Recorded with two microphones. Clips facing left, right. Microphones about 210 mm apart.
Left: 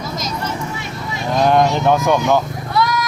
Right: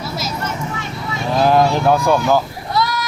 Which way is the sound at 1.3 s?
5° right (ahead or behind).